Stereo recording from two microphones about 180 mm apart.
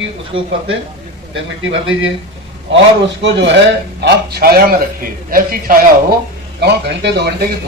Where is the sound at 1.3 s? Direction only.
90° right.